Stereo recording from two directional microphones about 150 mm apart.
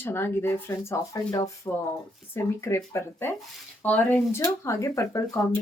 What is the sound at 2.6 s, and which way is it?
Speech, 20° left (ahead or behind).